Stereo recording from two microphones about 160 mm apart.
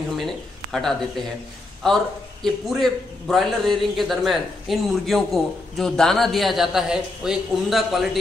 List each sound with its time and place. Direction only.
0.1 s a man's voice: centre (ahead or behind)
2.4 s a man's voice: centre (ahead or behind)